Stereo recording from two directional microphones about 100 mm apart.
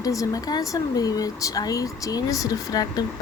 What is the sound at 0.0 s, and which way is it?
Speech, 35° left (ahead or behind).